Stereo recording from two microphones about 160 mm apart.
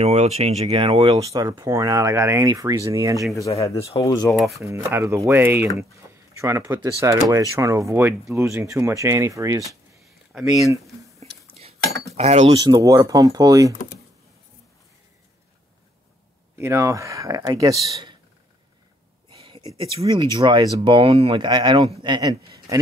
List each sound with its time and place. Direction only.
0.0 s speech: 40° right (ahead or behind); by 3.2 s 20° right (ahead or behind)
3.3 s speech: 20° left (ahead or behind)
4.6 s speech: 20° right (ahead or behind)
11.1 s a sound: 40° right (ahead or behind)
12.2 s speech: 40° right (ahead or behind)
12.6 s speech: 25° right (ahead or behind)
16.5 s speech: 15° right (ahead or behind)
19.2 s a sound: 30° right (ahead or behind)
20.3 s speech: 25° right (ahead or behind)